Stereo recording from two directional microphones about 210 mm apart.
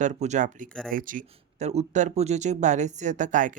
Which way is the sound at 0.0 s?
35° right (ahead or behind).